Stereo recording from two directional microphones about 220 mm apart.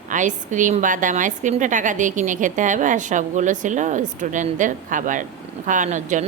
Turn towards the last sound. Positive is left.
turn(degrees=-35)  # may be behind; listen again after turning